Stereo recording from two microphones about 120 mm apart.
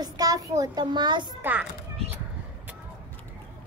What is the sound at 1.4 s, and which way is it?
Speech, 15° right (ahead or behind).